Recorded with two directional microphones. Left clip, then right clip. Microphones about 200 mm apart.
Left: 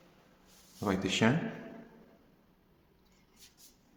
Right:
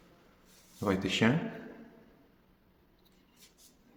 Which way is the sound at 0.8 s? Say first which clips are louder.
Right 1 dB; 5° right (ahead or behind).